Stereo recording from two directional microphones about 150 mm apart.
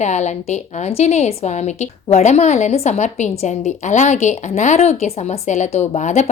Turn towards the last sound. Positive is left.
turn(degrees=50)  # may be behind; listen again after turning